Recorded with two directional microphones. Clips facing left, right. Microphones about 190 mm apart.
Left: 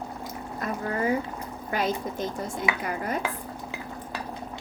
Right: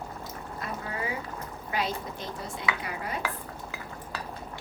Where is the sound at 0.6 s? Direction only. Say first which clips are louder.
Left 8 dB; 45° left (ahead or behind).